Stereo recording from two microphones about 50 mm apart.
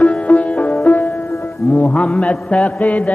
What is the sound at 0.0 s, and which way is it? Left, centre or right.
Music, left.